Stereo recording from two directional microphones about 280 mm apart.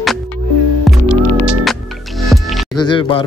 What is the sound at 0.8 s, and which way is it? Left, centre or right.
Music, centre.